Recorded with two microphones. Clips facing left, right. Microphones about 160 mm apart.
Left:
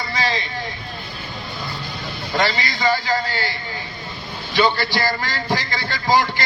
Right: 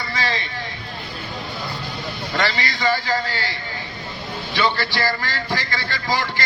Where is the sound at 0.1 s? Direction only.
20° left (ahead or behind).